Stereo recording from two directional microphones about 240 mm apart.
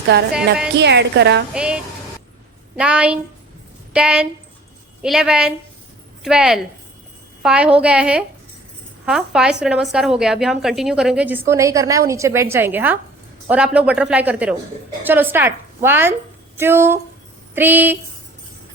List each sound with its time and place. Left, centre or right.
0.1 s a woman's voice: right
1.5 s a woman's voice: centre